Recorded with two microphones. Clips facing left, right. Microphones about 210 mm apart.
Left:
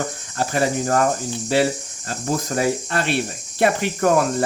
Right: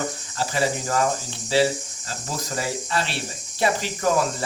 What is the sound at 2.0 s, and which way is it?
Speech, 50° left (ahead or behind).